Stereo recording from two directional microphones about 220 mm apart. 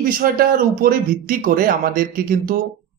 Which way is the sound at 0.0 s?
40° right (ahead or behind).